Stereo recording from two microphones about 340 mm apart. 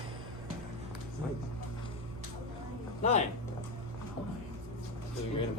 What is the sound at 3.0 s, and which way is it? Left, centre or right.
Speech, centre.